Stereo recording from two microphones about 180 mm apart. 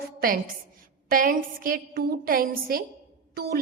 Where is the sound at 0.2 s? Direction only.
55° right (ahead or behind).